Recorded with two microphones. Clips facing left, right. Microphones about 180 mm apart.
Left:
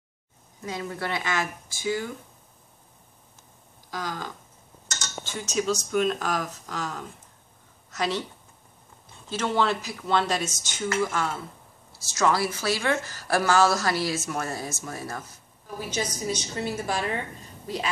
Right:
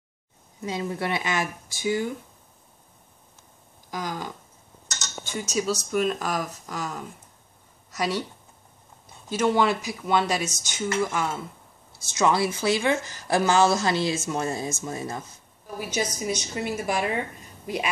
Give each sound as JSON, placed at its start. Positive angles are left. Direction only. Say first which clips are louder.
{"t": 0.6, "sound": "a woman's voice", "louder": "right 3 dB", "side_deg": -20}
{"t": 3.9, "sound": "speech", "louder": "right 2 dB", "side_deg": -15}
{"t": 9.3, "sound": "a woman's voice", "louder": "right 3 dB", "side_deg": -10}
{"t": 15.8, "sound": "speech", "louder": "right 2 dB", "side_deg": -10}